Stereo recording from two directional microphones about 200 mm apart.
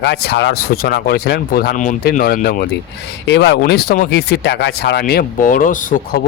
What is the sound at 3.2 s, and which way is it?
A man's voice, 60° left (ahead or behind).